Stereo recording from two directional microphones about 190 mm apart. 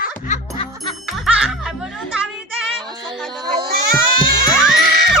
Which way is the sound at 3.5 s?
55° right (ahead or behind).